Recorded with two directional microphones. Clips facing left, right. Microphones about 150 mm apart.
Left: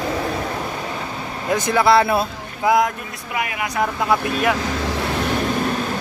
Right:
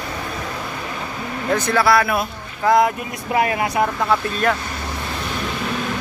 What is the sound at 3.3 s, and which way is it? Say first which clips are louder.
Speech: right 6 dB; 35° right (ahead or behind).